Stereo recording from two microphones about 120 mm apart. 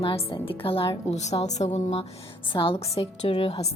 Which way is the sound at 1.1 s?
70° left (ahead or behind).